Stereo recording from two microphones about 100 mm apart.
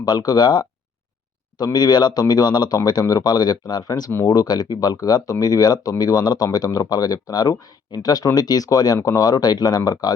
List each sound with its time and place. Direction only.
0.0 s speech: 40° left (ahead or behind)